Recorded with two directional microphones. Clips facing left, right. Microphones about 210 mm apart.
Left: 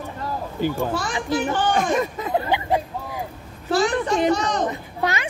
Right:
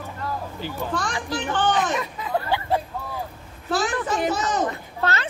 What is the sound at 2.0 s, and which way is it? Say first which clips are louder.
Speech: left 6 dB; 45° left (ahead or behind).